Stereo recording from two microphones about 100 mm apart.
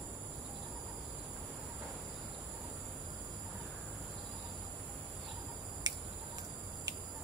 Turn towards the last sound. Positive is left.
turn(degrees=-45)  # may be behind; listen again after turning